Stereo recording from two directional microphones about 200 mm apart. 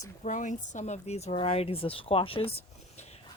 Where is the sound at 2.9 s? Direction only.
35° left (ahead or behind).